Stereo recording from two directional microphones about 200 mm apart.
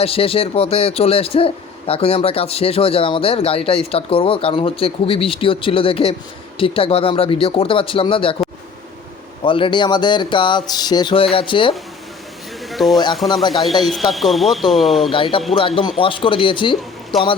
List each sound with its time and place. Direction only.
0.0 s speech: 30° left (ahead or behind)
9.4 s speech: 25° left (ahead or behind)
12.7 s speech: centre (ahead or behind)
15.1 s speech: 25° left (ahead or behind)